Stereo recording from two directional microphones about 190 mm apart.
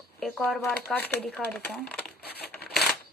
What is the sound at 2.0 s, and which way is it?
Crumpling, 55° left (ahead or behind).